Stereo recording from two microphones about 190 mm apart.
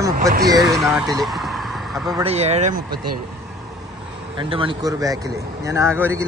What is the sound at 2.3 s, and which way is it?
Speech, 35° right (ahead or behind).